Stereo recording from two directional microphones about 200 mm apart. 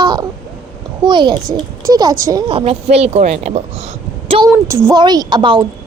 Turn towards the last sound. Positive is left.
turn(degrees=-25)  # may be behind; listen again after turning